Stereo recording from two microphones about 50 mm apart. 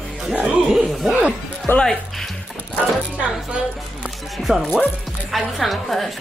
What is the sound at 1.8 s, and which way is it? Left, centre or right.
Speech, centre.